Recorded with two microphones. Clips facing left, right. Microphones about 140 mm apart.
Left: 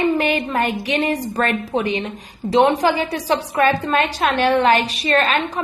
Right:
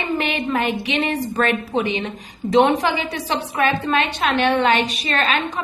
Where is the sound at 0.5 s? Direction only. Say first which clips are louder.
Left 1 dB; 40° left (ahead or behind).